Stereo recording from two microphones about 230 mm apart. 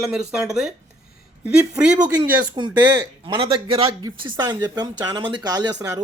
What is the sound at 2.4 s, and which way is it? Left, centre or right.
Speech, centre.